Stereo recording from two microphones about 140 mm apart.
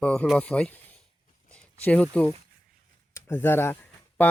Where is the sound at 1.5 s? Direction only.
10° left (ahead or behind).